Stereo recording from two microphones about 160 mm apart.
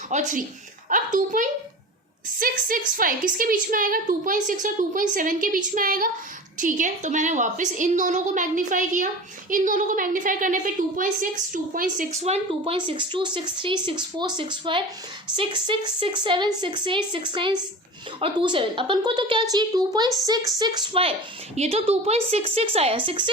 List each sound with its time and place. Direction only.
0.1 s a woman's voice: 50° right (ahead or behind); by 23.3 s 30° right (ahead or behind)